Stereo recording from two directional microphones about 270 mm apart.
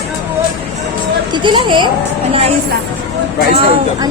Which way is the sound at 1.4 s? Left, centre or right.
Centre.